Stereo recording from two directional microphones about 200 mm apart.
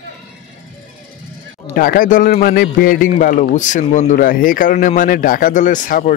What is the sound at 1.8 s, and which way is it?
A man's voice, 45° left (ahead or behind).